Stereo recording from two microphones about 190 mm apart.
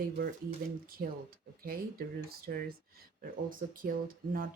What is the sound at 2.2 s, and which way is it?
Speech, 55° right (ahead or behind).